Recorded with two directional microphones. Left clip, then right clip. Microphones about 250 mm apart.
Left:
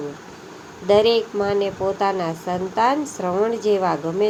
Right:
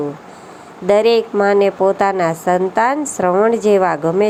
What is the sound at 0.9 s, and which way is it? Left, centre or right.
A woman's voice, right.